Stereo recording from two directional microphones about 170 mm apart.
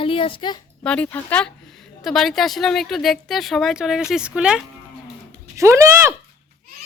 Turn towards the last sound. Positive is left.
turn(degrees=-15)  # may be behind; listen again after turning